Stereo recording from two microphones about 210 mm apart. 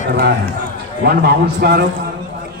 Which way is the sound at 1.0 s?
50° right (ahead or behind).